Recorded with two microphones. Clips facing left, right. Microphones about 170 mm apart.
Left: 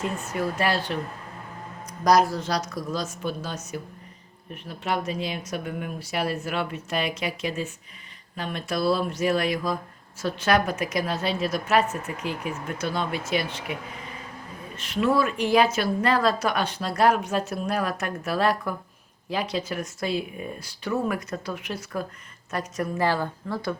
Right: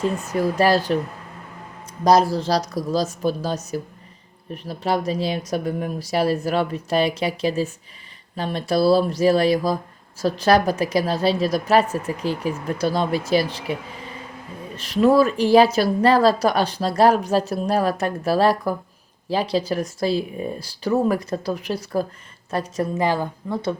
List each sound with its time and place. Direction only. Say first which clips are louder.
0.0 s speech: right 6 dB; 35° right (ahead or behind)
1.9 s speech: right 4 dB; 25° right (ahead or behind)
14.8 s a woman's voice: right 7 dB; 35° right (ahead or behind)
23.0 s a woman's voice: right 1 dB; 15° right (ahead or behind)